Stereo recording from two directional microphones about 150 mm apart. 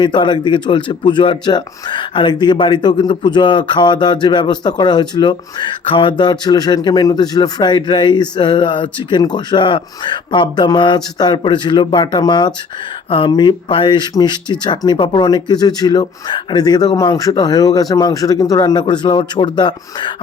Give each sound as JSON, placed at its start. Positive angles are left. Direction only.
{"t": 0.0, "sound": "speech", "side_deg": 30}